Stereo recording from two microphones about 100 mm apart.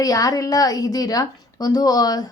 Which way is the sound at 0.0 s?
35° left (ahead or behind).